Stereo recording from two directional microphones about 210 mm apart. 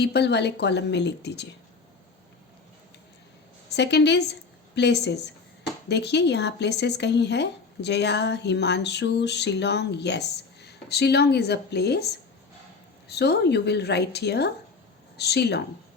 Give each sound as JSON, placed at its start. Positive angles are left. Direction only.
{"t": 0.0, "sound": "speech", "side_deg": 55}
{"t": 3.7, "sound": "speech", "side_deg": 55}